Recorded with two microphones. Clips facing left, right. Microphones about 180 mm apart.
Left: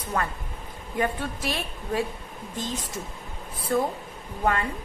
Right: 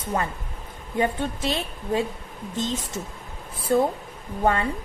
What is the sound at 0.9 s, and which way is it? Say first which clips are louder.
A woman's voice: right 3 dB; 25° right (ahead or behind).